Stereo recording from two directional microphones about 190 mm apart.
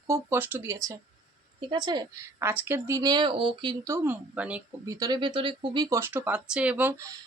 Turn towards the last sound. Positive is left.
turn(degrees=-15)  # may be behind; listen again after turning